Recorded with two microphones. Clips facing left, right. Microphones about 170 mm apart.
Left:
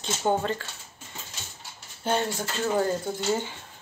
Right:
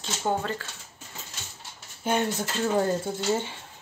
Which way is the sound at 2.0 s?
10° right (ahead or behind).